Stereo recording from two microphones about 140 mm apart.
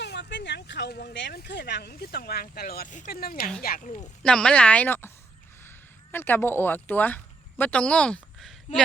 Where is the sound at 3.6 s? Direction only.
80° left.